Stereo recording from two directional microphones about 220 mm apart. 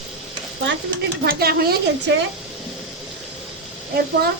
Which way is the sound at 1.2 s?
45° right (ahead or behind).